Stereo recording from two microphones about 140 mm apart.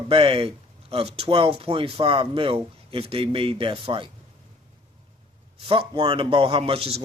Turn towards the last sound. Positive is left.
turn(degrees=-40)  # may be behind; listen again after turning